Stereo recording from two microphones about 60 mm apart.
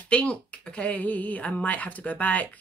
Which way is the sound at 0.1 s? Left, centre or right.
Centre.